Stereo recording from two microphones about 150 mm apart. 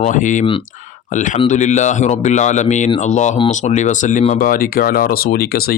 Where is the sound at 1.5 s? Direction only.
55° left (ahead or behind).